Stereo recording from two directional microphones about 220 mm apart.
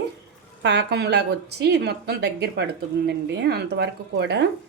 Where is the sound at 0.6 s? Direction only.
50° right (ahead or behind).